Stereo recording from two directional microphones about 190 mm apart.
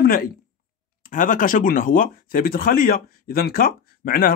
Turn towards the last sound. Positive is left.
turn(degrees=50)  # may be behind; listen again after turning